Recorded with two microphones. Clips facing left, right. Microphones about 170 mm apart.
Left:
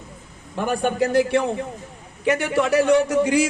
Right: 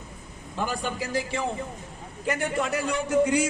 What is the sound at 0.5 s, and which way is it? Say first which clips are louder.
A man's voice: left 7 dB; 60° left (ahead or behind).